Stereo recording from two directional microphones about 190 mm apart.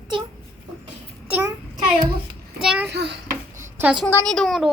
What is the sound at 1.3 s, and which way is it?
Child singing, 10° right (ahead or behind).